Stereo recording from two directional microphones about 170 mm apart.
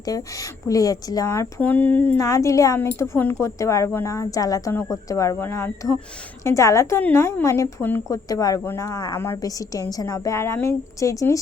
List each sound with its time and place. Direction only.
0.0 s a woman's voice: 20° left (ahead or behind)